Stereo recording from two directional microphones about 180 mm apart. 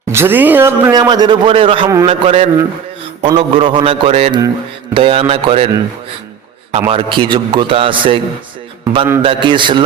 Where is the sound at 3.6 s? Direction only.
30° right (ahead or behind).